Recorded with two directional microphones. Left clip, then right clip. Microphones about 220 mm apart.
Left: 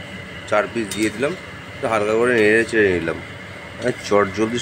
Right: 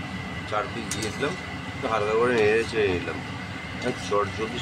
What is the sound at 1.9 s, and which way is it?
Speech, 25° left (ahead or behind).